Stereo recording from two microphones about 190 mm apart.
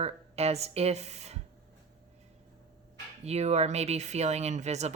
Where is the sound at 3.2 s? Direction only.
35° right (ahead or behind).